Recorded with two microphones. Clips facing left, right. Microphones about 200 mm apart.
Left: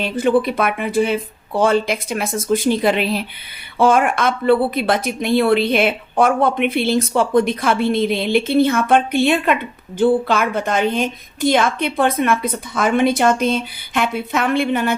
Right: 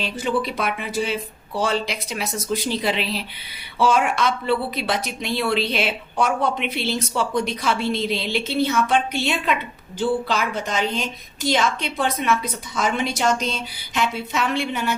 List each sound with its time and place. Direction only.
0.0 s a woman's voice: 55° left (ahead or behind)